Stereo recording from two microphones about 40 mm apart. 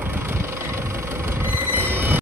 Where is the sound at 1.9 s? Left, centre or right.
Right.